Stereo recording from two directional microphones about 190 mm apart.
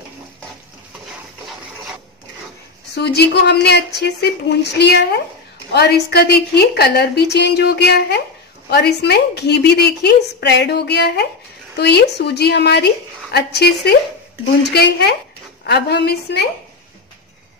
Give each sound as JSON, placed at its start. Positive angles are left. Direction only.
{"t": 3.0, "sound": "a woman's voice", "side_deg": 60}